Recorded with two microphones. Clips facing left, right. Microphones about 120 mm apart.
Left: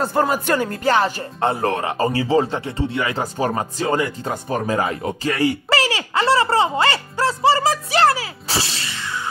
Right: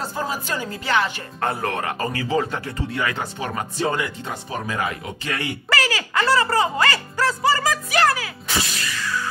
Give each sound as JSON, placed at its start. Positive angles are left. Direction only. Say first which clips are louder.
{"t": 0.0, "sound": "speech", "louder": "left 8 dB", "side_deg": 60}
{"t": 0.9, "sound": "speech", "louder": "left 3 dB", "side_deg": 40}
{"t": 4.3, "sound": "speech", "louder": "left 6 dB", "side_deg": 50}
{"t": 4.7, "sound": "speech", "louder": "left 5 dB", "side_deg": 35}